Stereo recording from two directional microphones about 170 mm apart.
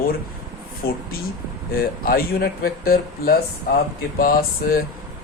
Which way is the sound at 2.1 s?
60° left (ahead or behind).